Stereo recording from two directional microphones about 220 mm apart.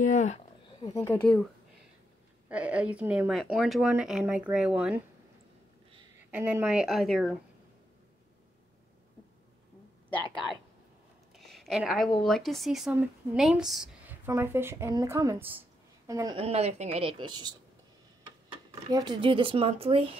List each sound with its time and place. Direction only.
0.0 s a sound: 35° left (ahead or behind)
1.0 s speech: 5° left (ahead or behind)
2.5 s speech: 5° right (ahead or behind)
6.3 s speech: 10° right (ahead or behind)
11.3 s a sound: centre (ahead or behind)
12.2 s a woman's voice: centre (ahead or behind); by 17.6 s 20° right (ahead or behind)
18.9 s a woman's voice: 20° right (ahead or behind)